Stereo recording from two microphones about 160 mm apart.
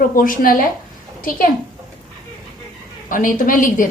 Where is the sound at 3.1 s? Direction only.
60° left (ahead or behind).